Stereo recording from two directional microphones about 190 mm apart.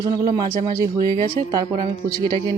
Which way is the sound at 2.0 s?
50° right (ahead or behind).